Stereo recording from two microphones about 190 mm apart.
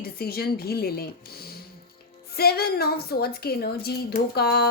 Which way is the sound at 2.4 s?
55° left (ahead or behind).